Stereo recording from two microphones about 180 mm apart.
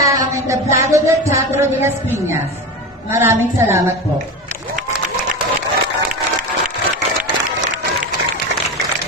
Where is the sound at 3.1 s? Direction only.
15° right (ahead or behind).